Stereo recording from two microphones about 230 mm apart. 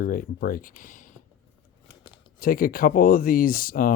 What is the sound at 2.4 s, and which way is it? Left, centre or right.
Speech, left.